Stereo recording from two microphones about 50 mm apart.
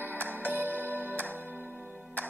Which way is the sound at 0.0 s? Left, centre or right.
Right.